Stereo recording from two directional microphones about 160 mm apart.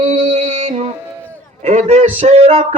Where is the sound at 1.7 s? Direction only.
45° right (ahead or behind).